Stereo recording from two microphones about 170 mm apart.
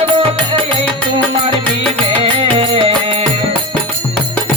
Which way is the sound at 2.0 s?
35° right (ahead or behind).